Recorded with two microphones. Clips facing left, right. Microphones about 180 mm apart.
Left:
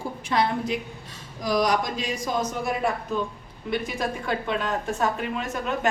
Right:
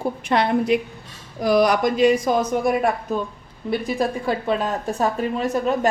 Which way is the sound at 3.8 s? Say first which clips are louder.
Right 6 dB; 35° right (ahead or behind).